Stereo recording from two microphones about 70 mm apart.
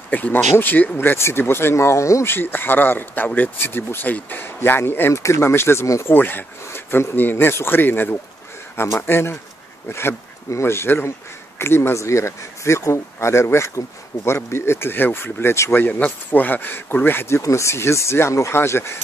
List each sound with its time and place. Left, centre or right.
0.1 s speech: left
2.2 s speech: left
6.0 s speech: left
15.8 s speech: left
17.4 s speech: left